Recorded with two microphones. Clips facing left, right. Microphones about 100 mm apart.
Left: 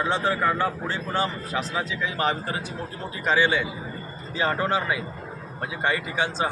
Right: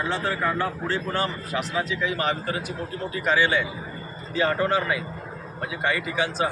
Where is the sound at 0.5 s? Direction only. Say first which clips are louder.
Even; 20° left (ahead or behind).